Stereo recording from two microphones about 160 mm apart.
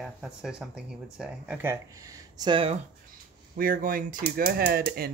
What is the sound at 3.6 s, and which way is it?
Speech, 60° right (ahead or behind).